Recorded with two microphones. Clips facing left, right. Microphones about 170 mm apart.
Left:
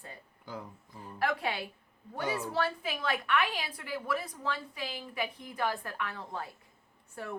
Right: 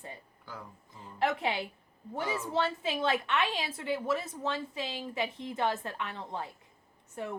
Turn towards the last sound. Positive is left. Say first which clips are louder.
# right 3 dB
turn(degrees=-20)  # may be behind; listen again after turning